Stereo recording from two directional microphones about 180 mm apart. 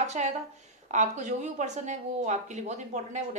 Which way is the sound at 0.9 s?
40° right (ahead or behind).